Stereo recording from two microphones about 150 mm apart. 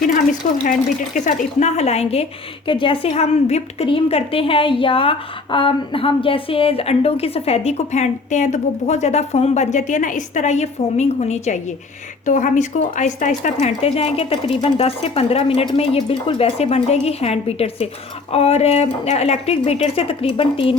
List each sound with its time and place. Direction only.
0.6 s a woman's voice: 60° left (ahead or behind); by 20.7 s 35° left (ahead or behind)